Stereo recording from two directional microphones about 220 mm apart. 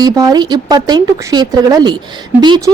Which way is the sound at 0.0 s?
15° right (ahead or behind).